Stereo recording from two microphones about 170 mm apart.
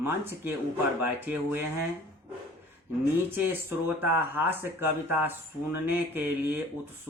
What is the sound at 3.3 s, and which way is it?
Speech, 10° right (ahead or behind).